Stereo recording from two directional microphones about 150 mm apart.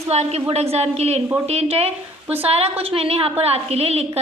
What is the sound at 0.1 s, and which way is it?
A woman's voice, 45° right (ahead or behind).